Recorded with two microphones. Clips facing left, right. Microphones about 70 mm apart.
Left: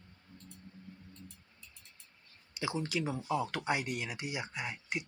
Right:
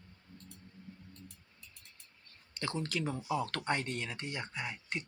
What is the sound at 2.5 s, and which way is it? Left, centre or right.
Speech, centre.